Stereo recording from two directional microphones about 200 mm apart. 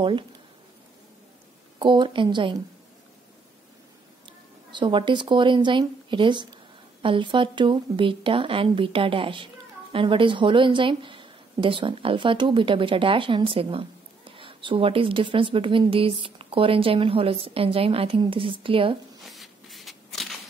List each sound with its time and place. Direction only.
1.8 s a woman's voice: 25° right (ahead or behind)
4.3 s a woman's voice: 25° right (ahead or behind)
19.2 s a sound: centre (ahead or behind)